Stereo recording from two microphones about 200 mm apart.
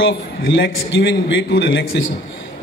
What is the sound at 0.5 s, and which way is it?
A man's voice, 65° left (ahead or behind).